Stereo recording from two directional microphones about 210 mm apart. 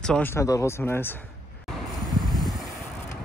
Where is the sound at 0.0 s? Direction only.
5° left (ahead or behind).